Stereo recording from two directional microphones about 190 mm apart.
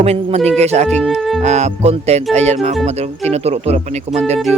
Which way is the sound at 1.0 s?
Centre (ahead or behind).